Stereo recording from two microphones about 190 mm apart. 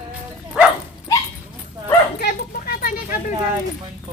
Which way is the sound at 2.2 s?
55° left (ahead or behind).